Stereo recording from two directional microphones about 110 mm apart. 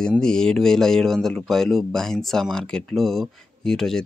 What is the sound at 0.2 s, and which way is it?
Speech, 5° left (ahead or behind).